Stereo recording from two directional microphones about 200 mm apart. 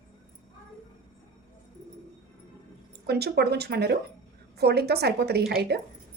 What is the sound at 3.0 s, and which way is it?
A woman's voice, 55° right (ahead or behind).